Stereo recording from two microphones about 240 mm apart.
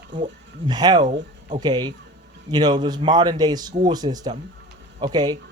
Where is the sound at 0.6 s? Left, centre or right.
Centre.